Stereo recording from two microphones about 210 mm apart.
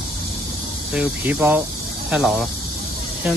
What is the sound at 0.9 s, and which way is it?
Speech, 5° right (ahead or behind).